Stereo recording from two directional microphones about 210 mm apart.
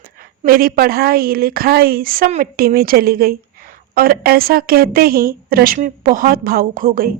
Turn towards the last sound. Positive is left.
turn(degrees=-45)  # may be behind; listen again after turning